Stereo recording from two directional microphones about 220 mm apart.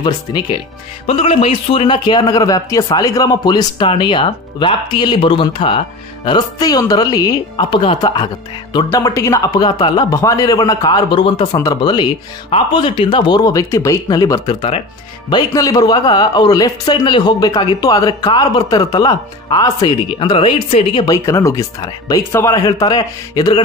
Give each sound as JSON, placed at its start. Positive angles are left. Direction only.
{"t": 0.0, "sound": "a man's voice", "side_deg": 20}